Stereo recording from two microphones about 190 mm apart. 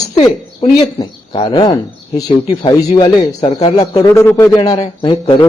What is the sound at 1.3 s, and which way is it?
Speech, 25° left (ahead or behind).